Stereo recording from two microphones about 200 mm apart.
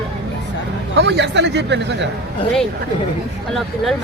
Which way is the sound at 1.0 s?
55° right (ahead or behind).